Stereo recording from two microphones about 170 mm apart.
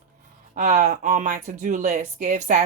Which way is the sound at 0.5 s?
45° right (ahead or behind).